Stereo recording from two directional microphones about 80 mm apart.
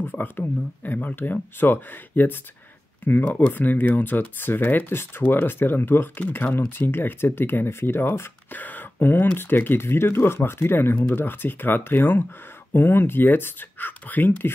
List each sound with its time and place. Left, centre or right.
0.0 s speech: left